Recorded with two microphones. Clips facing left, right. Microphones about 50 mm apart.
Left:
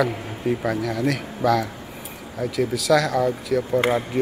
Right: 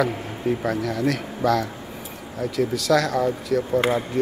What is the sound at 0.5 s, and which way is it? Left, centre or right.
Speech, centre.